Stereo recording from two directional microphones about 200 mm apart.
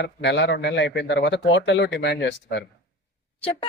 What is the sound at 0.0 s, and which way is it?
Speech, 60° left (ahead or behind).